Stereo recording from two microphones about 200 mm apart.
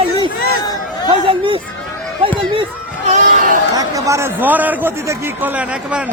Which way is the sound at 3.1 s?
35° right (ahead or behind).